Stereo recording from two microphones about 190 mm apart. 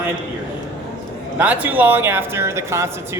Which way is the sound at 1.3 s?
10° right (ahead or behind).